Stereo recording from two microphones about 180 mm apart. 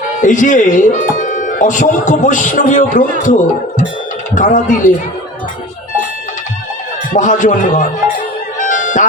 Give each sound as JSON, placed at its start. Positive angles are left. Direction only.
{"t": 0.2, "sound": "speech", "side_deg": 45}
{"t": 7.1, "sound": "speech", "side_deg": 45}
{"t": 8.5, "sound": "music", "side_deg": 45}